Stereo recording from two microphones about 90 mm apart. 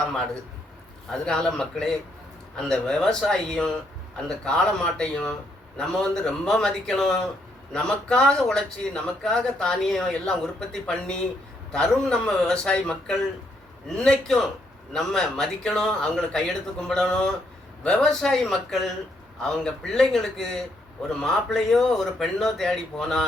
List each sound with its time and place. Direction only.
1.1 s a man's voice: 5° left (ahead or behind)